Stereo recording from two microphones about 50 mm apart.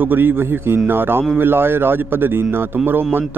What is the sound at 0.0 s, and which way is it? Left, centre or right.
A man's voice, right.